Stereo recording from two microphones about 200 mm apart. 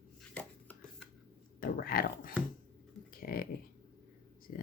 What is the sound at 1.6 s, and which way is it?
Speech, 45° left (ahead or behind).